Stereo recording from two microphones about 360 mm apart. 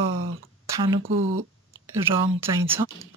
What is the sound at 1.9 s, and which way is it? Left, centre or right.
Speech, centre.